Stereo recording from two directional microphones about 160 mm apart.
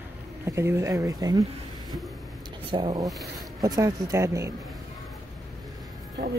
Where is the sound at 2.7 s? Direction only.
25° right (ahead or behind).